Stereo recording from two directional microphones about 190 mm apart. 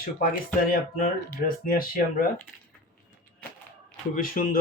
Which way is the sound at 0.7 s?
50° left (ahead or behind).